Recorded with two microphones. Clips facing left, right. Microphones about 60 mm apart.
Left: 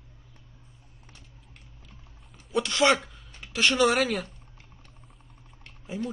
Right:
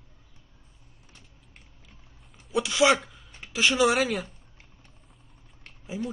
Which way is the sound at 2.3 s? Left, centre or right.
Centre.